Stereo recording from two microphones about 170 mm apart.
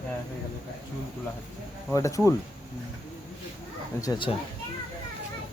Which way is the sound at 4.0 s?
25° left (ahead or behind).